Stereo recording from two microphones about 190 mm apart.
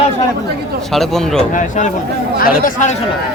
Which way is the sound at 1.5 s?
40° left (ahead or behind).